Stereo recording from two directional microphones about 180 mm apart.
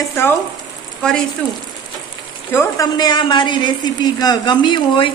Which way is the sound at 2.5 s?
15° left (ahead or behind).